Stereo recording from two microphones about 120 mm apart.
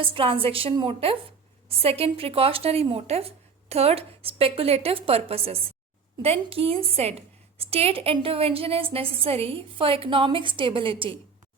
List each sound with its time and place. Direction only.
0.0 s a woman's voice: 50° right (ahead or behind)